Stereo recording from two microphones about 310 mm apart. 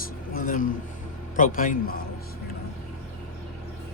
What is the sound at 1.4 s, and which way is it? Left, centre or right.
Speech, left.